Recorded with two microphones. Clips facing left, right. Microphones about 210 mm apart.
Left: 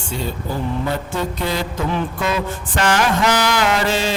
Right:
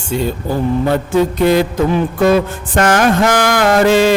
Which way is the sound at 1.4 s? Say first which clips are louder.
Right 12 dB; 55° right (ahead or behind).